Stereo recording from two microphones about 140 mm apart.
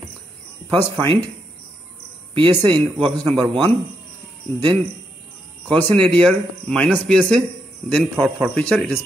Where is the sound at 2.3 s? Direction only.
35° right (ahead or behind).